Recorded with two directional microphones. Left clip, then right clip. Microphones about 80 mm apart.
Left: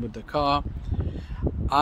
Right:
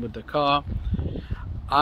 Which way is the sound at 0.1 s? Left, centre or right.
Left.